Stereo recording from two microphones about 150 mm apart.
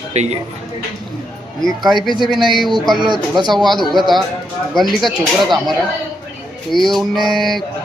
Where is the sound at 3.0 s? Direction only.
30° right (ahead or behind).